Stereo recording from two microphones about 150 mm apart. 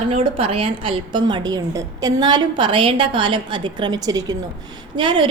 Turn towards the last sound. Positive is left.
turn(degrees=-35)  # may be behind; listen again after turning